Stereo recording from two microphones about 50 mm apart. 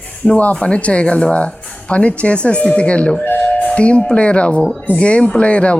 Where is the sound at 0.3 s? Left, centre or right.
Left.